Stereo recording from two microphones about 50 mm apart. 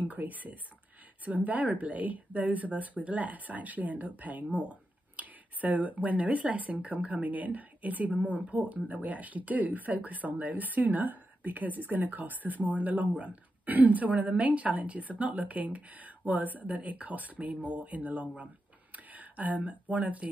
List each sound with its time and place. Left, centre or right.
0.1 s speech: right